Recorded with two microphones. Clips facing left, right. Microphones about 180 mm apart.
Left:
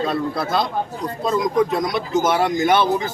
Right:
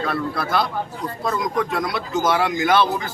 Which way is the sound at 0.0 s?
20° left (ahead or behind).